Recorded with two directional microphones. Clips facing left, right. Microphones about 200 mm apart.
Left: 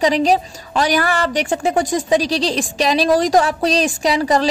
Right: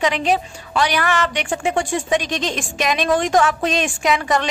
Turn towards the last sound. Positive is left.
turn(degrees=35)  # may be behind; listen again after turning